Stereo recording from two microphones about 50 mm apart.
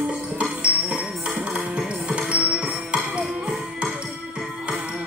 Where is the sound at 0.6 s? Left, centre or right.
Right.